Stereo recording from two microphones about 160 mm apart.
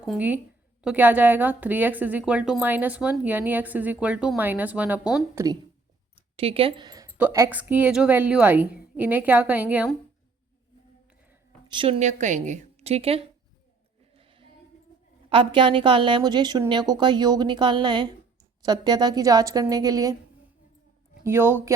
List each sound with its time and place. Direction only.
0.0 s a woman's voice: 5° right (ahead or behind)
6.1 s a sound: 35° right (ahead or behind)
7.2 s a woman's voice: 15° right (ahead or behind)
11.7 s a woman's voice: 30° right (ahead or behind)
11.9 s a woman's voice: 50° right (ahead or behind)
14.2 s a sound: 35° right (ahead or behind)
15.3 s a woman's voice: 30° right (ahead or behind)
21.2 s a woman's voice: 15° right (ahead or behind)